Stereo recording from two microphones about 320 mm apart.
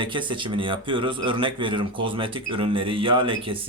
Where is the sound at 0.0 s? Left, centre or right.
Centre.